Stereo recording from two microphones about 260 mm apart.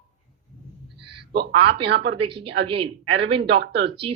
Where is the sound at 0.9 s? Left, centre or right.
Right.